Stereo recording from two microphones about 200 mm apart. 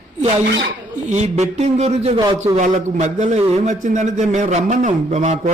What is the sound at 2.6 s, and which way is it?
Speech, 35° right (ahead or behind).